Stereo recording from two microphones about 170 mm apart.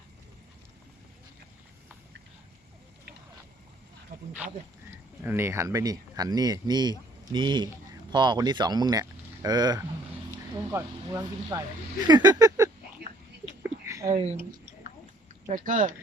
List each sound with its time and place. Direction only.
4.1 s snake: 55° right (ahead or behind)
5.2 s speech: 15° right (ahead or behind)
13.6 s a sound: 15° right (ahead or behind)
14.1 s speech: 40° right (ahead or behind)
15.4 s speech: 50° right (ahead or behind)